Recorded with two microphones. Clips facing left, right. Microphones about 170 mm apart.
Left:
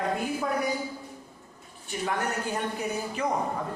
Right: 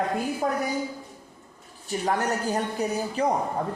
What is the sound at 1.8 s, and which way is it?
Speech, 40° right (ahead or behind).